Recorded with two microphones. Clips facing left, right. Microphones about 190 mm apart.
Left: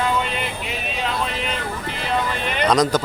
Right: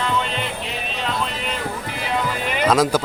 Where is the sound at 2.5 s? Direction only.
5° right (ahead or behind).